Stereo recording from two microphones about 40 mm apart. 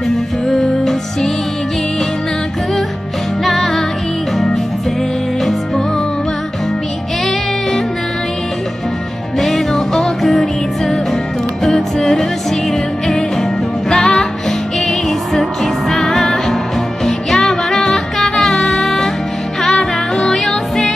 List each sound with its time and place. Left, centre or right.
0.5 s music: centre
3.4 s music: centre
9.4 s music: centre